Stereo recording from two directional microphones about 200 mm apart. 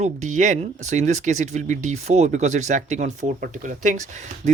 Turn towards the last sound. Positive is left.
turn(degrees=-35)  # may be behind; listen again after turning